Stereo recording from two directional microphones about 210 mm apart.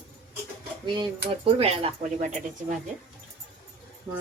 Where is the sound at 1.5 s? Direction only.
30° right (ahead or behind).